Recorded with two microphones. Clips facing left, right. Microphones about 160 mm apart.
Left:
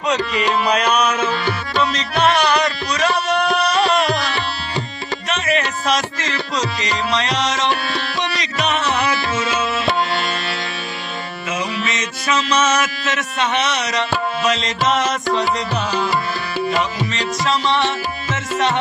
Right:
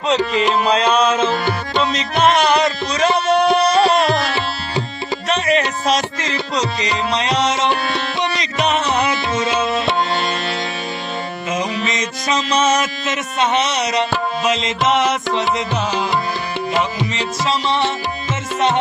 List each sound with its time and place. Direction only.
0.1 s music: 25° right (ahead or behind)
11.5 s mantra: 35° right (ahead or behind)
14.4 s music: 20° right (ahead or behind)
17.2 s music: 20° right (ahead or behind)